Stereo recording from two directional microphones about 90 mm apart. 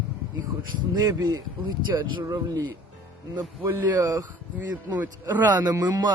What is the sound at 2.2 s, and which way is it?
Speech, 35° right (ahead or behind).